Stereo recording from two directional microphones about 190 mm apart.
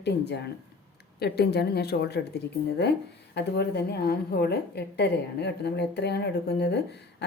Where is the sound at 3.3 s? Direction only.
60° left (ahead or behind).